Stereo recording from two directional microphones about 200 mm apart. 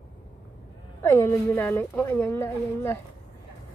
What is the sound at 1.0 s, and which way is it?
Speech, 10° left (ahead or behind).